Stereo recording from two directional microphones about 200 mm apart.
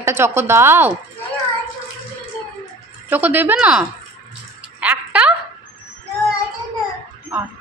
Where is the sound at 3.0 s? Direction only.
10° right (ahead or behind).